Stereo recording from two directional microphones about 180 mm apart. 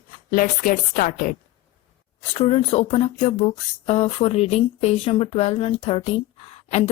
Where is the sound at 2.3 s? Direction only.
30° left (ahead or behind).